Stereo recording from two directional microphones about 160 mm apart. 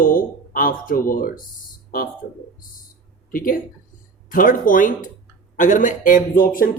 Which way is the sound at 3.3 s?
60° left (ahead or behind).